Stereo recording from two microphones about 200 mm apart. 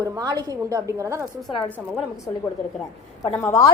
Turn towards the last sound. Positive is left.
turn(degrees=15)  # may be behind; listen again after turning